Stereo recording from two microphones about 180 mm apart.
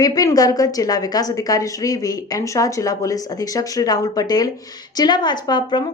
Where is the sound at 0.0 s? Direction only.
20° left (ahead or behind).